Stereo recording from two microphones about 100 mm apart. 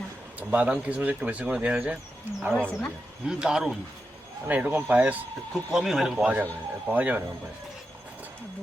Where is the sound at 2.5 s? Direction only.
5° left (ahead or behind).